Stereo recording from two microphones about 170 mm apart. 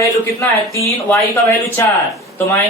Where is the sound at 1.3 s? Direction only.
15° left (ahead or behind).